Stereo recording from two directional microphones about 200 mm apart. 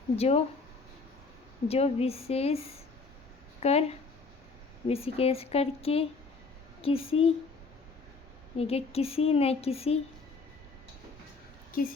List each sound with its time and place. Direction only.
0.2 s a woman's voice: 30° left (ahead or behind)
1.6 s a woman's voice: 30° left (ahead or behind)
3.6 s a woman's voice: 30° left (ahead or behind)
8.5 s speech: 30° left (ahead or behind)